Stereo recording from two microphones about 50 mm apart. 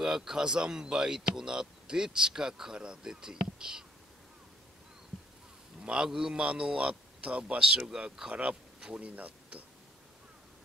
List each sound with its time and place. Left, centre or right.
0.0 s speech: centre
5.8 s a sound: centre
6.0 s a man's voice: centre